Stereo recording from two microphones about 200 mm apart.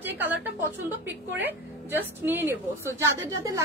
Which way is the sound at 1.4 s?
10° right (ahead or behind).